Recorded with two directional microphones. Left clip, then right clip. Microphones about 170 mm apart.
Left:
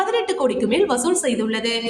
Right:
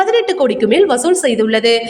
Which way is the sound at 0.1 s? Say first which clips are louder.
Right 7 dB; 25° right (ahead or behind).